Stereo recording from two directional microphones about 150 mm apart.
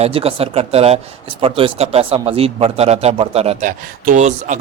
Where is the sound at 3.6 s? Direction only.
55° right (ahead or behind).